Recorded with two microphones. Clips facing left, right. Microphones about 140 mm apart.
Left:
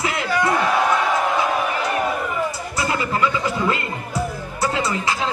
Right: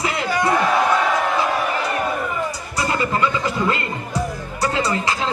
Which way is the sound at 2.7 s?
5° left (ahead or behind).